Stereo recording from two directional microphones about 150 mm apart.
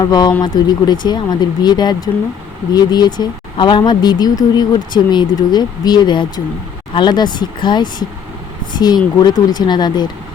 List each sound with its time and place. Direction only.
0.0 s speech: 25° left (ahead or behind)